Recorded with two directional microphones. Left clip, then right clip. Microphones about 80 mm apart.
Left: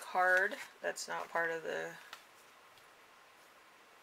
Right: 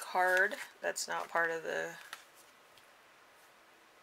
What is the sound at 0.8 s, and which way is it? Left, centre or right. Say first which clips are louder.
Speech: right 3 dB; right.